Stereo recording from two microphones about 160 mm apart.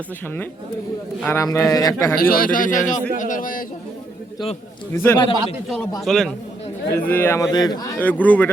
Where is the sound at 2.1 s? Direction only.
65° left (ahead or behind).